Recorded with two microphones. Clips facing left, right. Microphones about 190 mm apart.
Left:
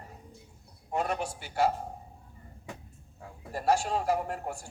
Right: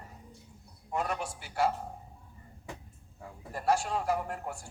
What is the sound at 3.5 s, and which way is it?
A man's voice, 30° left (ahead or behind).